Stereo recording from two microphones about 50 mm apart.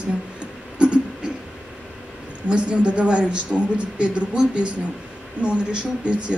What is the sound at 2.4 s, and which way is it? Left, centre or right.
A woman's voice, right.